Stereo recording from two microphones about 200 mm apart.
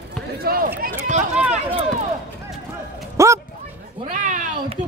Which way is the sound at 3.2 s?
15° right (ahead or behind).